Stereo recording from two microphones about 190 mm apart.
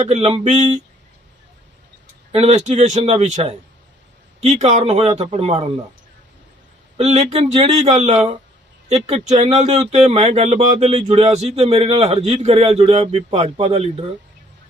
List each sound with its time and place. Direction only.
0.0 s speech: 35° right (ahead or behind)
2.3 s speech: 35° right (ahead or behind)
6.9 s speech: 35° right (ahead or behind)